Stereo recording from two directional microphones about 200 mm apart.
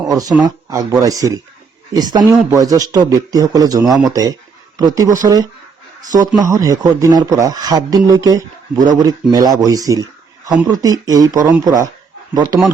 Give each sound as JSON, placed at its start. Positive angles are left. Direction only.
{"t": 0.4, "sound": "speech", "side_deg": -20}